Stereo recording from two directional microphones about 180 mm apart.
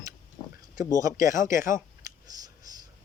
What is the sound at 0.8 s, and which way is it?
Speech, 20° right (ahead or behind).